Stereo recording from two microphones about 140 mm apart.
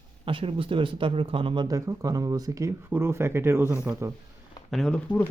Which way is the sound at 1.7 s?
25° right (ahead or behind).